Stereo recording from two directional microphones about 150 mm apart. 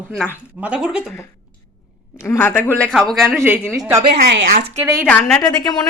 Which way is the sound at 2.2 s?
15° left (ahead or behind).